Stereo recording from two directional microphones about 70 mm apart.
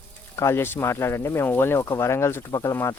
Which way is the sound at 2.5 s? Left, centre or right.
Left.